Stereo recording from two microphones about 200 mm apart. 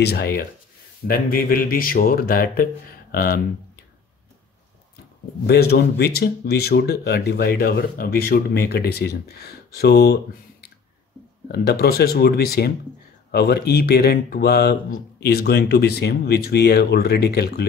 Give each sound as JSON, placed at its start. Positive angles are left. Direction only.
{"t": 0.0, "sound": "speech", "side_deg": 50}
{"t": 5.5, "sound": "speech", "side_deg": 50}
{"t": 11.4, "sound": "speech", "side_deg": 50}